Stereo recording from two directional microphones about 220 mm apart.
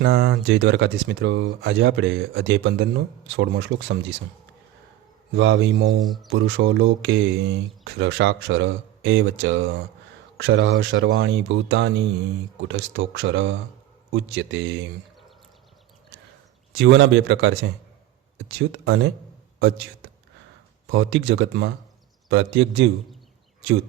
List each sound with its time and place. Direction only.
0.0 s speech: 45° right (ahead or behind)
5.3 s speech: 55° right (ahead or behind)
16.7 s speech: 55° right (ahead or behind)
20.9 s speech: 60° right (ahead or behind)